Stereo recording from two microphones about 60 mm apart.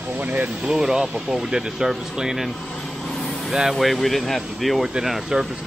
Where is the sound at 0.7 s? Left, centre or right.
Centre.